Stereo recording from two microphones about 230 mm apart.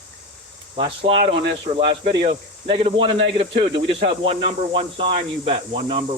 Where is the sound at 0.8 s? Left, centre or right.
Right.